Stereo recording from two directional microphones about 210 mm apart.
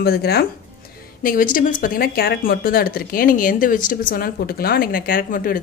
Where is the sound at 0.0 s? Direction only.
50° left (ahead or behind).